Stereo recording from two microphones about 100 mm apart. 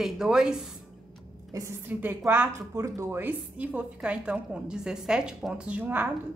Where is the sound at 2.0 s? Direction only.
20° right (ahead or behind).